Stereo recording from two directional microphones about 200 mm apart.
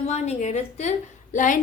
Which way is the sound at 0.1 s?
35° left (ahead or behind).